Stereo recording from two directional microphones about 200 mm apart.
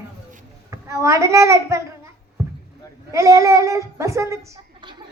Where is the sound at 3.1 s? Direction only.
15° right (ahead or behind).